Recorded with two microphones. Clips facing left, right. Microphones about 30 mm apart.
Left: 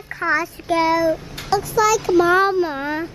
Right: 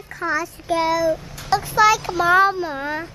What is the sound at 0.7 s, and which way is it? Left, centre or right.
Speech, centre.